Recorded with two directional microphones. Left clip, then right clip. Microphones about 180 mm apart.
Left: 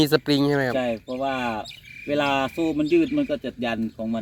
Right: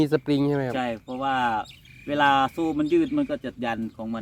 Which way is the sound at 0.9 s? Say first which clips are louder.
Left 2 dB; 15° right (ahead or behind).